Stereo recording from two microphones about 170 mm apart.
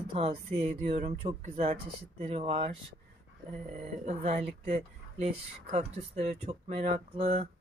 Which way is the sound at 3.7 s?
40° right (ahead or behind).